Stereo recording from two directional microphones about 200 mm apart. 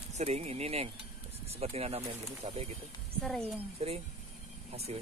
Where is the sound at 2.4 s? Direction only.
30° right (ahead or behind).